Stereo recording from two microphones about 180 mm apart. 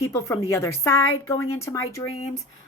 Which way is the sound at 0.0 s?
15° left (ahead or behind).